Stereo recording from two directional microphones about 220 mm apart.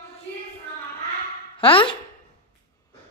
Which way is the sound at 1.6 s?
25° left (ahead or behind).